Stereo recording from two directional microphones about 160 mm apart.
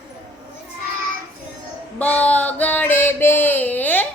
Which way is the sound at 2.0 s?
10° left (ahead or behind).